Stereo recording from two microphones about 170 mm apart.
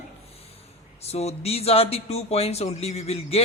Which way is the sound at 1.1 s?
40° left (ahead or behind).